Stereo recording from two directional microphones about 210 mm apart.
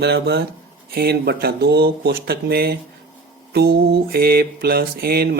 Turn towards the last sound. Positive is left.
turn(degrees=-50)  # may be behind; listen again after turning